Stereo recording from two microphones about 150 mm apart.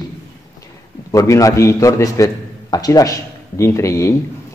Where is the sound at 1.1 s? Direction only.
20° left (ahead or behind).